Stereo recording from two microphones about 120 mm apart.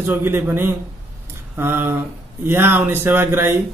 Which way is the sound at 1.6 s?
20° right (ahead or behind).